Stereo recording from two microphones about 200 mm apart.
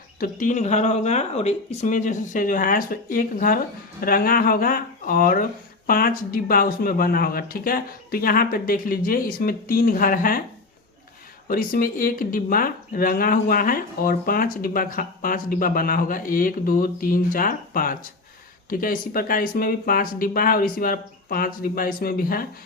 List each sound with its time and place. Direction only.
0.2 s speech: 40° left (ahead or behind)
11.4 s speech: 45° left (ahead or behind)